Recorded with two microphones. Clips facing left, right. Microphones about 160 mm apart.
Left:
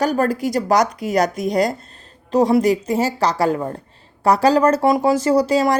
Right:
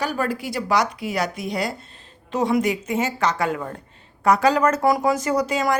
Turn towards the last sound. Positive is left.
turn(degrees=35)  # may be behind; listen again after turning